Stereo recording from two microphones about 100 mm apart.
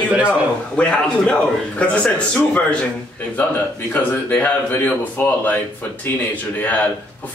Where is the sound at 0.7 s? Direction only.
10° left (ahead or behind).